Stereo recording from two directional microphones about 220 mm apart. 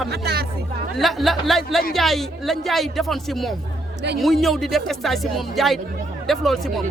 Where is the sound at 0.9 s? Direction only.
Centre (ahead or behind).